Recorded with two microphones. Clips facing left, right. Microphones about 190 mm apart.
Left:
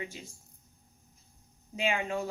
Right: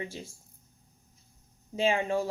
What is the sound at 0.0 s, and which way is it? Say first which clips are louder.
Speech: right 3 dB; 30° right (ahead or behind).